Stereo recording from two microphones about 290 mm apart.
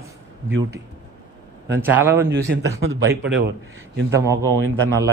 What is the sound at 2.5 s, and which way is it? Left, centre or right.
Speech, right.